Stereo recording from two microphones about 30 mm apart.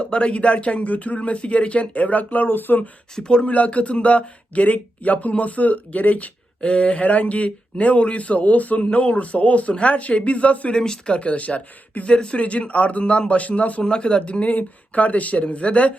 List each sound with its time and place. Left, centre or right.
0.0 s speech: left
3.2 s speech: left
3.4 s speech: left
6.6 s speech: left
9.7 s speech: left
10.8 s speech: left
11.2 s speech: left
12.0 s speech: left
12.4 s speech: left
13.8 s speech: left
14.5 s speech: left
15.4 s speech: left